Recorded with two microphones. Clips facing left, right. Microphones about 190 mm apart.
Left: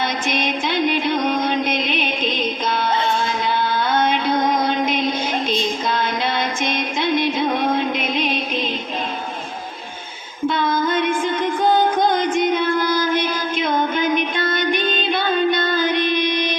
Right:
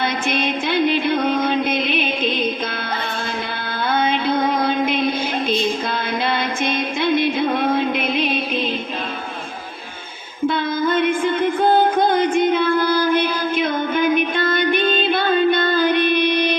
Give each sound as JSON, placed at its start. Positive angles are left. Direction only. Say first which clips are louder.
{"t": 0.0, "sound": "music", "louder": "right 1 dB", "side_deg": -60}
{"t": 4.9, "sound": "female singing", "louder": "right 1 dB", "side_deg": -55}
{"t": 10.5, "sound": "music", "louder": "even", "side_deg": -60}